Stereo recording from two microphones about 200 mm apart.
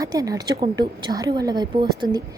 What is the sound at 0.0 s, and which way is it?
A woman's voice, 20° right (ahead or behind).